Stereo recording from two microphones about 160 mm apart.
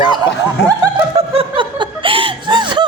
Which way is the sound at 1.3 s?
30° right (ahead or behind).